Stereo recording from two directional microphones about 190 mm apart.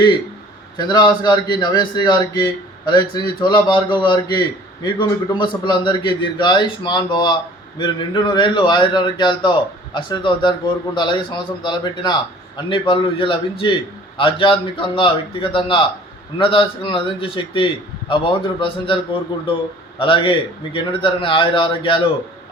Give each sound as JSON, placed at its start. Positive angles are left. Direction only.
{"t": 0.8, "sound": "a man's voice", "side_deg": 25}
{"t": 20.0, "sound": "a man's voice", "side_deg": 25}